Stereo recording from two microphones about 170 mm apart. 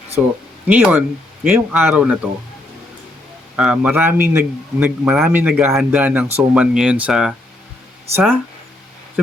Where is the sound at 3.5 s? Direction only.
5° right (ahead or behind).